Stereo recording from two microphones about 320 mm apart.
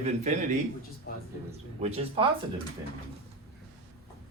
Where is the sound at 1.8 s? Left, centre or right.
Centre.